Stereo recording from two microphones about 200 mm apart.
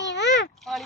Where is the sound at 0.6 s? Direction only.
Centre (ahead or behind).